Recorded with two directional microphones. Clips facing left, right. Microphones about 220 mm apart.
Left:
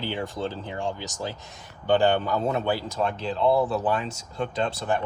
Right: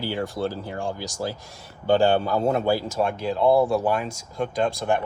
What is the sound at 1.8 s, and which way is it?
A man's voice, 10° right (ahead or behind).